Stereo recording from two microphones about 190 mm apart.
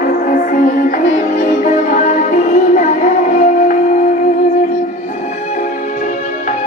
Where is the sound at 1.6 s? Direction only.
40° left (ahead or behind).